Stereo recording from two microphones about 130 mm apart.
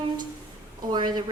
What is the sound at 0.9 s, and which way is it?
Speech, 35° right (ahead or behind).